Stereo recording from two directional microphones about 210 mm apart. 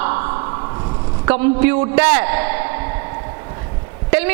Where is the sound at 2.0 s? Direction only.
15° right (ahead or behind).